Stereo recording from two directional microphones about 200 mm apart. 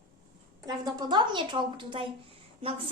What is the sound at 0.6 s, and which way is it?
A woman's voice, 20° right (ahead or behind).